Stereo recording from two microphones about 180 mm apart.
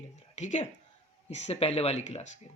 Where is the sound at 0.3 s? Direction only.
40° left (ahead or behind).